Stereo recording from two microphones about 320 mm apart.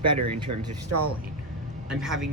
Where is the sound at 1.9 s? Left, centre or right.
Centre.